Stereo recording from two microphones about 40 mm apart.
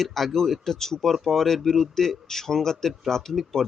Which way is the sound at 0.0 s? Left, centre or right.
Centre.